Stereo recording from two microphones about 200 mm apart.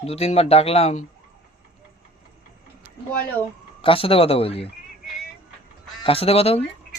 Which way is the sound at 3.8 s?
25° left (ahead or behind).